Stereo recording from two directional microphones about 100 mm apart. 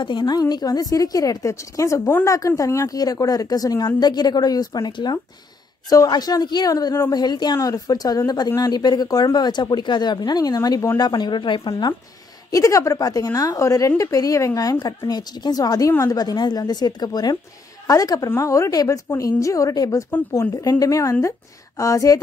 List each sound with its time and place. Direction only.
0.0 s a woman's voice: 45° left (ahead or behind)
12.4 s a woman's voice: 35° left (ahead or behind)